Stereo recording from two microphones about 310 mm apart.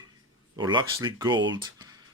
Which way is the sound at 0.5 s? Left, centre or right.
Centre.